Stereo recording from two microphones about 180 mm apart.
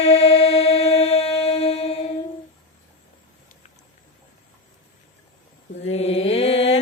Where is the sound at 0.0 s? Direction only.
35° left (ahead or behind).